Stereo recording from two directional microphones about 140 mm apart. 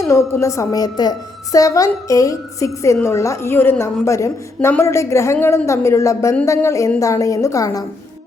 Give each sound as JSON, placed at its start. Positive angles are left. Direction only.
{"t": 0.0, "sound": "a woman's voice", "side_deg": 20}